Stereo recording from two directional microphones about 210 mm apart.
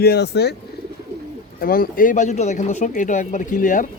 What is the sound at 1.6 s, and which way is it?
Speech, 45° left (ahead or behind).